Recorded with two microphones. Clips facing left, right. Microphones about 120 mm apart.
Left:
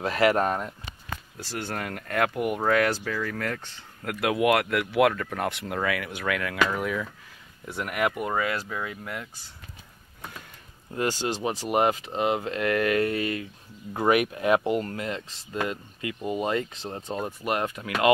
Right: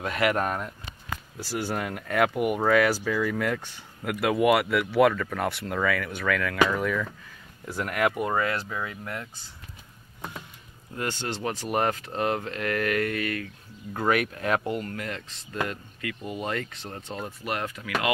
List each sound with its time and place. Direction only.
0.0 s speech: 30° left (ahead or behind)
1.4 s speech: 5° right (ahead or behind)
11.0 s speech: 15° left (ahead or behind)
12.4 s speech: 25° left (ahead or behind)
14.6 s speech: 30° left (ahead or behind)